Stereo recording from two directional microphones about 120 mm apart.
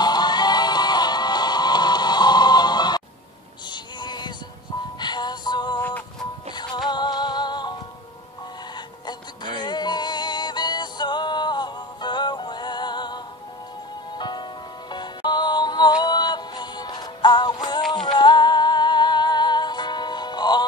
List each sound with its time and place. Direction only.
0.0 s music: 35° left (ahead or behind)
5.8 s music: 15° left (ahead or behind)
6.5 s music: 40° left (ahead or behind)
8.7 s music: 40° left (ahead or behind)